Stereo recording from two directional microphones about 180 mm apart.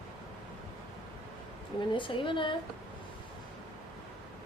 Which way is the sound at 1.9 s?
30° left (ahead or behind).